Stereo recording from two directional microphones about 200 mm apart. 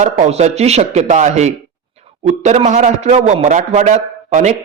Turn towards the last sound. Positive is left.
turn(degrees=-35)  # may be behind; listen again after turning